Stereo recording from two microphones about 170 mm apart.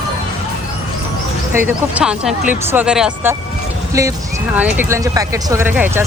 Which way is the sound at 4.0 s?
20° right (ahead or behind).